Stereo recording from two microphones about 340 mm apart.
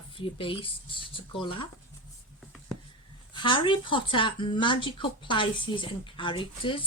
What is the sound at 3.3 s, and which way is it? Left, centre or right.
Speech, centre.